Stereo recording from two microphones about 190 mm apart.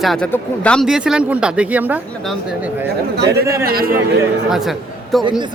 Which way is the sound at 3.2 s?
60° right (ahead or behind).